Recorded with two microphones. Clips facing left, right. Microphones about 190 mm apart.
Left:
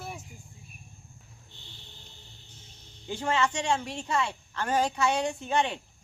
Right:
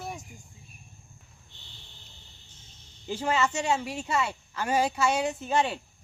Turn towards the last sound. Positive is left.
turn(degrees=-5)  # may be behind; listen again after turning